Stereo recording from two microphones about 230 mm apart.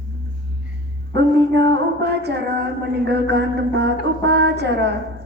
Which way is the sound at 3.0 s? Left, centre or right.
Right.